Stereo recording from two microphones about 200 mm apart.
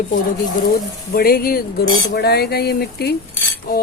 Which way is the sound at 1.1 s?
50° left (ahead or behind).